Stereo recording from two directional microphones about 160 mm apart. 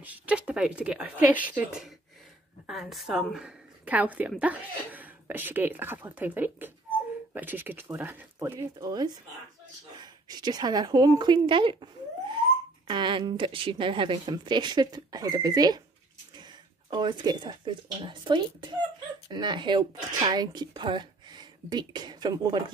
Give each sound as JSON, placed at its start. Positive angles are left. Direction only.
{"t": 0.0, "sound": "a woman's voice", "side_deg": -10}
{"t": 16.9, "sound": "speech", "side_deg": -30}